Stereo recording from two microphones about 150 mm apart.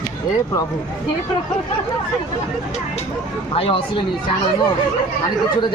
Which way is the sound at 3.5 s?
40° left (ahead or behind).